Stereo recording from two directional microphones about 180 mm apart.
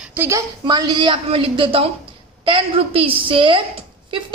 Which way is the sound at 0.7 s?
25° right (ahead or behind).